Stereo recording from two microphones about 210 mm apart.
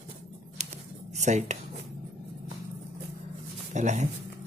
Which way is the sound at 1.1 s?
35° right (ahead or behind).